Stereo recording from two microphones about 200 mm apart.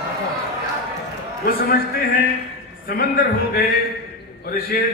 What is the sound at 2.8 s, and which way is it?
A man's voice, 45° left (ahead or behind).